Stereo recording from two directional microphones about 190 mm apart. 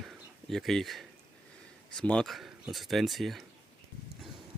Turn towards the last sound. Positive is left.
turn(degrees=0)  # may be behind; listen again after turning